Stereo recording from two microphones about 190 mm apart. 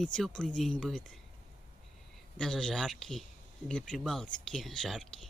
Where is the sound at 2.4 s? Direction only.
5° left (ahead or behind).